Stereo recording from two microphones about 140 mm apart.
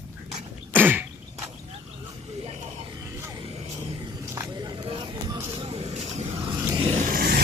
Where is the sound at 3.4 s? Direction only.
45° right (ahead or behind).